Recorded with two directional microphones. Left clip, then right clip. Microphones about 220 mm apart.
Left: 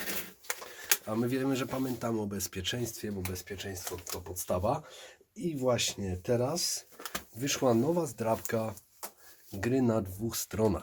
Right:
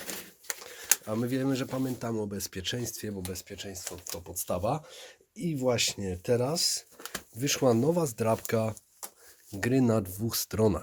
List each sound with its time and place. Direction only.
0.4 s speech: 35° right (ahead or behind)